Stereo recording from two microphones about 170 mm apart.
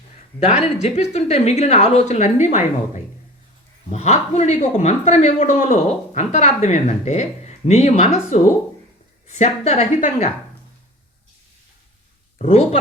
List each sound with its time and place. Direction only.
0.4 s a woman's voice: 40° left (ahead or behind)
12.4 s speech: 40° left (ahead or behind)